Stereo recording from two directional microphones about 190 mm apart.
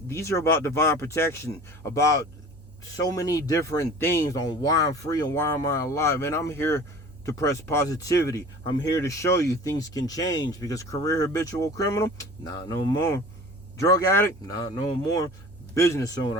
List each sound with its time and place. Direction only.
0.1 s speech: 15° left (ahead or behind)